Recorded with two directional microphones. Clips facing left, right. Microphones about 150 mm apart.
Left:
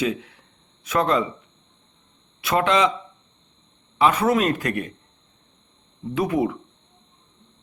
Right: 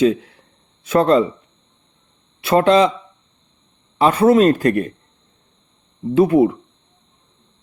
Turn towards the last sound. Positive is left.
turn(degrees=-30)  # may be behind; listen again after turning